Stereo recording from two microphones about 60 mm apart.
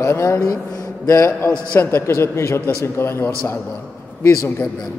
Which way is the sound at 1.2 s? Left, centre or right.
Left.